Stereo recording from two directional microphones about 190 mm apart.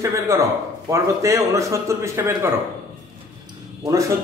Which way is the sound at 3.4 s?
20° right (ahead or behind).